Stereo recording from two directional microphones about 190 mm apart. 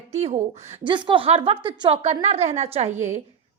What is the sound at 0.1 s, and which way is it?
A woman's voice, 35° right (ahead or behind).